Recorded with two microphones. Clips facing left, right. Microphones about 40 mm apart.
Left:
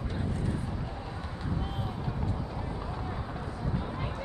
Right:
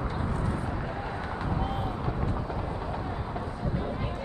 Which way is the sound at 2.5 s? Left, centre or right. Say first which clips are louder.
Right 4 dB; centre.